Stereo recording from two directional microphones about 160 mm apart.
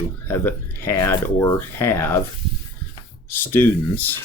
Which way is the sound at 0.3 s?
15° left (ahead or behind).